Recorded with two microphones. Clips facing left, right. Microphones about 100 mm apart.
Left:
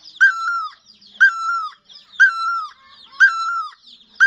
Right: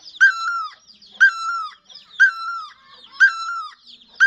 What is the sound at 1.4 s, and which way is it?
Bird, 15° left (ahead or behind).